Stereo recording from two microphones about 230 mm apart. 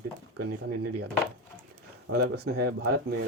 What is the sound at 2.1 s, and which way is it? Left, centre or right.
Speech, right.